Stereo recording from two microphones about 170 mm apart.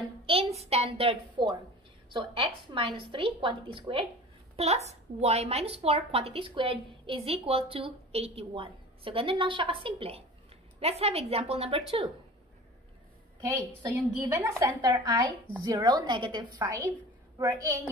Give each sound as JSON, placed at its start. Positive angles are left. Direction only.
{"t": 0.3, "sound": "a woman's voice", "side_deg": -35}
{"t": 14.2, "sound": "a woman's voice", "side_deg": -15}